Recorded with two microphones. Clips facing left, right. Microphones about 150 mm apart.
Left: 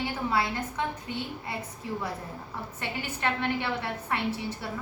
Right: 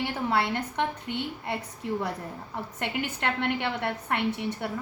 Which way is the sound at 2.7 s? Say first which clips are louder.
Right 5 dB; 65° right (ahead or behind).